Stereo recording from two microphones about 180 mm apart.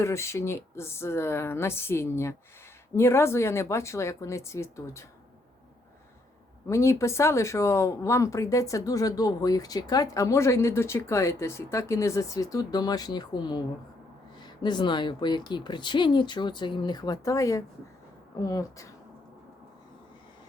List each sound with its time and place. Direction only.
0.0 s speech: 15° left (ahead or behind)
6.7 s speech: 15° left (ahead or behind)